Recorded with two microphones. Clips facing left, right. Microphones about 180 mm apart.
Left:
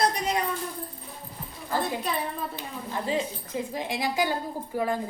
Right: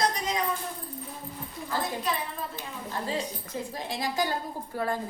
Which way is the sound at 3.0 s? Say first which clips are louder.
Left 5 dB; 20° left (ahead or behind).